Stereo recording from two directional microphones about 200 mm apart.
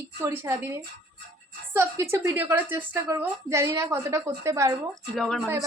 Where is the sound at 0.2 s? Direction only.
15° right (ahead or behind).